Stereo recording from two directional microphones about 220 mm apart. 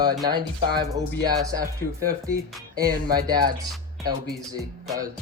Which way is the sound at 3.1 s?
20° right (ahead or behind).